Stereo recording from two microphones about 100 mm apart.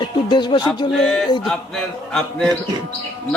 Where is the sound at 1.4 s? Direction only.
5° left (ahead or behind).